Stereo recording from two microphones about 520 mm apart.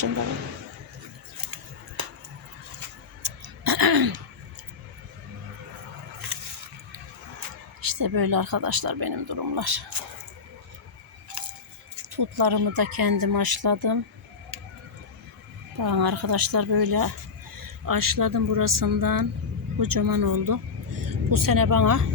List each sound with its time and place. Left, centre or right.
2.0 s a sound: right
3.2 s throat clearing: right
6.9 s speech: right
12.1 s speech: right
15.8 s speech: right